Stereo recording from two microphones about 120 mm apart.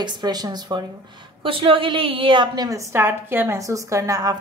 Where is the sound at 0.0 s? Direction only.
35° right (ahead or behind).